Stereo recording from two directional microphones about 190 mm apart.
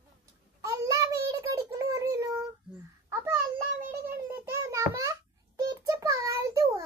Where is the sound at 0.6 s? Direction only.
15° right (ahead or behind).